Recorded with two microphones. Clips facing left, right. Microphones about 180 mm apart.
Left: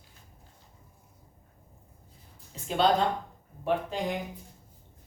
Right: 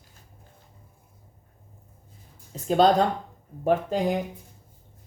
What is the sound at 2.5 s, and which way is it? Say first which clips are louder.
Speech: right 6 dB; 40° right (ahead or behind).